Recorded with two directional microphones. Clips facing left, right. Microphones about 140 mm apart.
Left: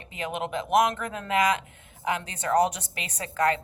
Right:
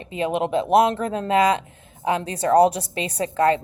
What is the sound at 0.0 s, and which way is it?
A woman's voice, 25° right (ahead or behind).